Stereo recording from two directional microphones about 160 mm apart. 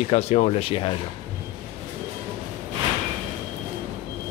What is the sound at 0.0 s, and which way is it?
Speech, 45° left (ahead or behind).